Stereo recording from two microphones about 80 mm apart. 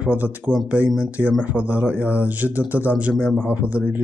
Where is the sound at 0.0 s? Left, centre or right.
Centre.